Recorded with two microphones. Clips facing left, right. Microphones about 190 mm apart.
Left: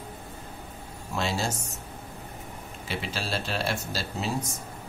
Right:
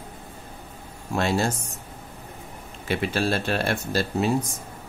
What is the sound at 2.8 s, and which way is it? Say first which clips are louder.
Speech: right 9 dB; 55° right (ahead or behind).